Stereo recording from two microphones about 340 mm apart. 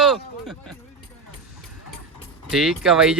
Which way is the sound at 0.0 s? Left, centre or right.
Centre.